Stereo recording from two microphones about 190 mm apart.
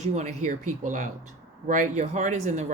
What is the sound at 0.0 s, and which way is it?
Speech, 40° right (ahead or behind).